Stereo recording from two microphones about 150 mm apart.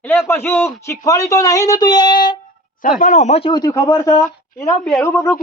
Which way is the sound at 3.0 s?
55° left (ahead or behind).